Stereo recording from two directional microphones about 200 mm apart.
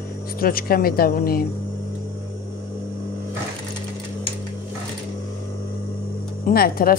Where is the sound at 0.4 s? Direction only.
45° left (ahead or behind).